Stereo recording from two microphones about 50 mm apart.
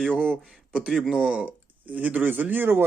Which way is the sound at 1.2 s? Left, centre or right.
Right.